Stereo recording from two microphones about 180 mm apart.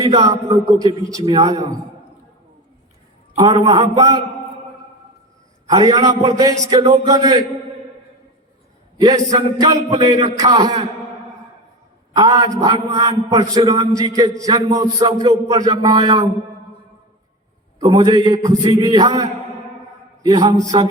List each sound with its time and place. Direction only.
0.0 s a man's voice: 20° right (ahead or behind)
3.3 s a man's voice: 20° right (ahead or behind)
5.6 s a man's voice: 20° right (ahead or behind)
9.0 s a man's voice: 20° right (ahead or behind)
12.1 s a man's voice: 20° right (ahead or behind)
17.7 s a man's voice: 25° right (ahead or behind)